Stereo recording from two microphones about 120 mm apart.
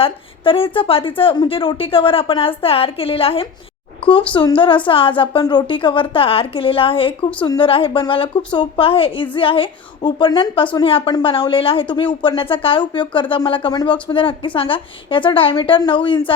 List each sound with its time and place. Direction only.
0.0 s a woman's voice: 50° left (ahead or behind)
7.4 s a woman's voice: 35° left (ahead or behind)
7.7 s a woman's voice: 45° left (ahead or behind)